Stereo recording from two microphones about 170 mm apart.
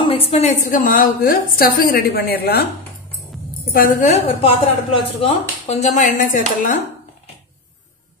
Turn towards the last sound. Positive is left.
turn(degrees=50)  # may be behind; listen again after turning